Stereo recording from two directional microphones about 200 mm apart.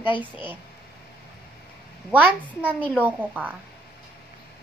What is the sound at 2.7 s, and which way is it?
Speech, 10° left (ahead or behind).